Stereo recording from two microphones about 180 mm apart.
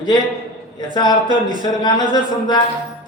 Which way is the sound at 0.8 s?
25° left (ahead or behind).